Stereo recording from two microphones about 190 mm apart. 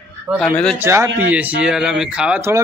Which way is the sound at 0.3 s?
5° right (ahead or behind).